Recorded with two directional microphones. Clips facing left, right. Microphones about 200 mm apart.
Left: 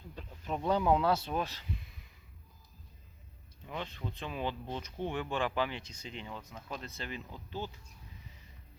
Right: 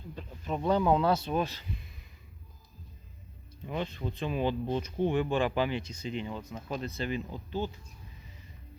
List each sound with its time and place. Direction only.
0.2 s a sound: 5° left (ahead or behind)
0.7 s speech: 10° left (ahead or behind)
3.7 s speech: 15° right (ahead or behind)